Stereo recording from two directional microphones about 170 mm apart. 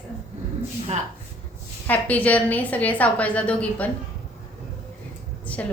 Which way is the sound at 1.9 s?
10° left (ahead or behind).